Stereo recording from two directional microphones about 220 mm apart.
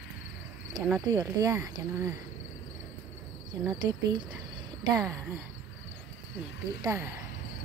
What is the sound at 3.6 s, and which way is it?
Speech, 15° right (ahead or behind).